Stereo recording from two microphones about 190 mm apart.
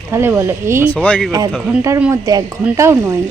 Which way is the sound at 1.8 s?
10° right (ahead or behind).